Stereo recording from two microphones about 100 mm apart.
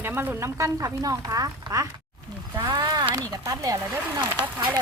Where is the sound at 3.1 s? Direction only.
35° right (ahead or behind).